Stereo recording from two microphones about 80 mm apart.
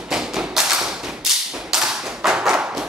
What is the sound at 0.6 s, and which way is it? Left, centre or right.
Thump, centre.